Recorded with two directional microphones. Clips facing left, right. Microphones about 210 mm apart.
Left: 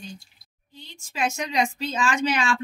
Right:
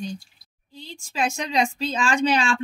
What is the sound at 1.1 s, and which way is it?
Speech, 30° right (ahead or behind).